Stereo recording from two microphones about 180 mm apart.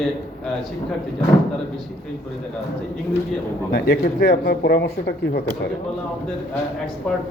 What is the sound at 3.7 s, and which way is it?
Speech, 60° left (ahead or behind).